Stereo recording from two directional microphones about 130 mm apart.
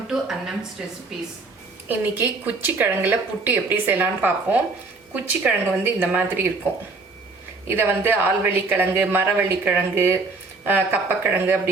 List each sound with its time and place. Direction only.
0.1 s a woman's voice: 5° right (ahead or behind)
1.9 s a woman's voice: 15° right (ahead or behind)
7.8 s a woman's voice: 15° right (ahead or behind)